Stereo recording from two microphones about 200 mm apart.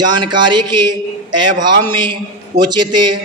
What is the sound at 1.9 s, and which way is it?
Mantra, 25° right (ahead or behind).